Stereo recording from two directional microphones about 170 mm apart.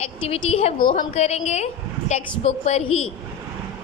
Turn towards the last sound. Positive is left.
turn(degrees=40)  # may be behind; listen again after turning